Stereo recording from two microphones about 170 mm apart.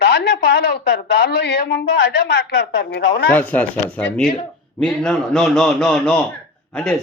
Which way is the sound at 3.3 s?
10° left (ahead or behind).